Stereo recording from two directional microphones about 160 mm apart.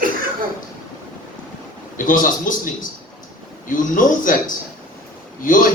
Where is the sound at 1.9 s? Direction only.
55° left (ahead or behind).